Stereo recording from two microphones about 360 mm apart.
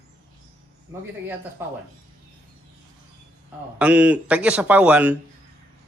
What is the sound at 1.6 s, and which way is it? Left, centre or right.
Speech, centre.